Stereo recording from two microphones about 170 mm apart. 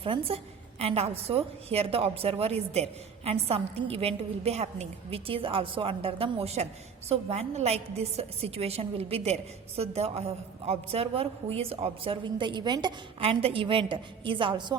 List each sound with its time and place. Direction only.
0.0 s a woman's voice: 30° right (ahead or behind)